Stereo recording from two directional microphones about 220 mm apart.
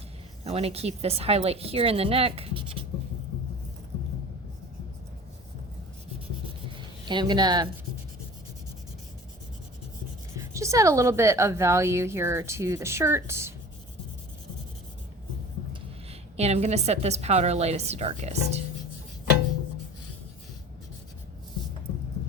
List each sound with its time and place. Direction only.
0.4 s speech: 30° right (ahead or behind)
7.0 s speech: 20° right (ahead or behind)
10.3 s a woman's voice: 15° right (ahead or behind)
16.4 s speech: 30° right (ahead or behind)